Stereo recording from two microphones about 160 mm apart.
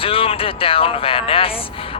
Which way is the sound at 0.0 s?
35° left (ahead or behind).